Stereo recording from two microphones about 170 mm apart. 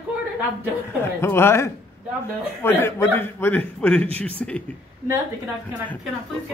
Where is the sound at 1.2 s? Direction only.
15° left (ahead or behind).